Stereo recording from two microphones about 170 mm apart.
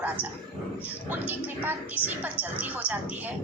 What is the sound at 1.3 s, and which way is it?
A woman's voice, 10° right (ahead or behind).